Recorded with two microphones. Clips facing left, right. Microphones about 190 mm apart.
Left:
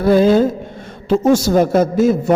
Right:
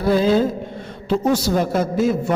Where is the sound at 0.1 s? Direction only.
50° left (ahead or behind).